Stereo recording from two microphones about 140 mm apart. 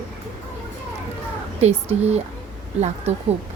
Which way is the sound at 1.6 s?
50° right (ahead or behind).